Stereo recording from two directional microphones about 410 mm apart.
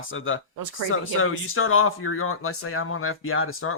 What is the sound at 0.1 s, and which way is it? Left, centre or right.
Speech, left.